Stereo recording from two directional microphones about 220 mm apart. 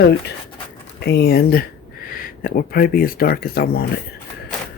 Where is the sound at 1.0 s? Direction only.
45° left (ahead or behind).